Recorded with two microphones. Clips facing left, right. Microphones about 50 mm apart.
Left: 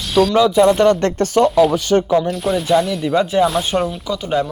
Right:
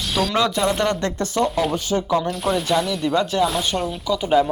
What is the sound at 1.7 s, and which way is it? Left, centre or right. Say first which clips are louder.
Speech: left 7 dB; left.